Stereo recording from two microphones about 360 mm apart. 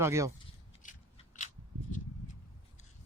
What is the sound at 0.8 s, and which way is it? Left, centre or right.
Scissors, left.